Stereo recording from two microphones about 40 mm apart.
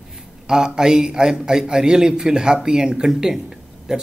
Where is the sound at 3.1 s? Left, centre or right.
Centre.